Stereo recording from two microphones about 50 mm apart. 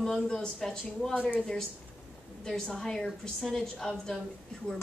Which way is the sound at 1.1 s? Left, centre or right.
Left.